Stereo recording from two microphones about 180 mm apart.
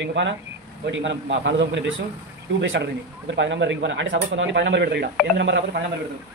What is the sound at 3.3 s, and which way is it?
Speech, 90° right.